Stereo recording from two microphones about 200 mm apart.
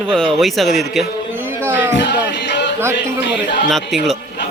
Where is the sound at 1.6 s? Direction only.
10° right (ahead or behind).